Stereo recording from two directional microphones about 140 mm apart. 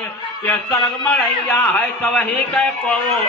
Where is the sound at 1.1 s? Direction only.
10° left (ahead or behind).